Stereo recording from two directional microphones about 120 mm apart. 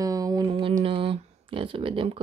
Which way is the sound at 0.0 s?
30° right (ahead or behind).